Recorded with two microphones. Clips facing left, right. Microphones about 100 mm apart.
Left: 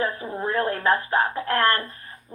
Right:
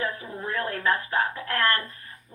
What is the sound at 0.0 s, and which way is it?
Speech, 35° left (ahead or behind).